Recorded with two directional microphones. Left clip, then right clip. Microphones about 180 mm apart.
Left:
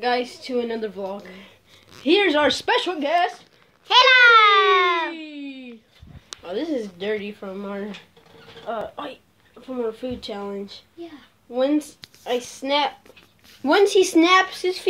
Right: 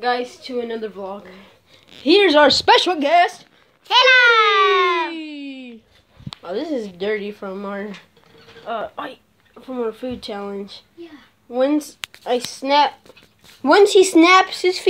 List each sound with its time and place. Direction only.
0.0 s a woman's voice: 5° right (ahead or behind)
2.0 s speech: 40° right (ahead or behind)
3.8 s a woman's voice: centre (ahead or behind)
5.1 s a sound: 35° right (ahead or behind)
6.4 s speech: 25° right (ahead or behind)
8.6 s speech: 25° right (ahead or behind)
12.5 s speech: 30° right (ahead or behind)